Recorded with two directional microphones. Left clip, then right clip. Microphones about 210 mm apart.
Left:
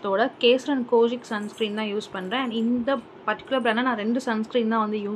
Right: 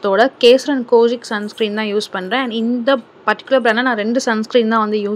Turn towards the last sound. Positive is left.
turn(degrees=-25)  # may be behind; listen again after turning